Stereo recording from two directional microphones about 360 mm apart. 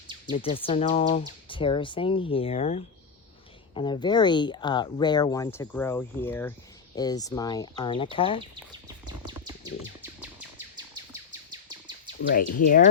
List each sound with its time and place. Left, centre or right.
0.3 s speech: centre
9.0 s bird: centre
11.7 s bird: centre
12.3 s speech: left